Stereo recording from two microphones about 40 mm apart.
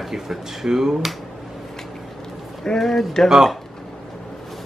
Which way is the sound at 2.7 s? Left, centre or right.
Centre.